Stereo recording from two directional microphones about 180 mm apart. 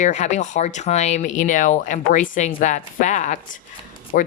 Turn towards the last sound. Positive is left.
turn(degrees=50)  # may be behind; listen again after turning